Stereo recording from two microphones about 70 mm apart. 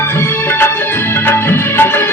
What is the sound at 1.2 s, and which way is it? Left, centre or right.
Music, left.